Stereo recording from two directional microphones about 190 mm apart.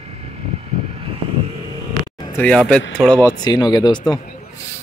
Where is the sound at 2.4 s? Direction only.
5° left (ahead or behind).